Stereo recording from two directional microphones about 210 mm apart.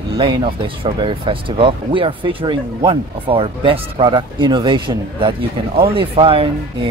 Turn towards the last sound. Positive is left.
turn(degrees=-25)  # may be behind; listen again after turning